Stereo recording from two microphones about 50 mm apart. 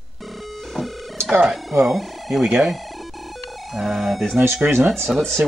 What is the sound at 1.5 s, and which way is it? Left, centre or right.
Speech, centre.